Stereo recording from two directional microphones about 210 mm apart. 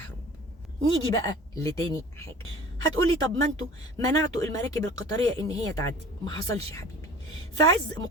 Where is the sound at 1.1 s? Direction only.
15° left (ahead or behind).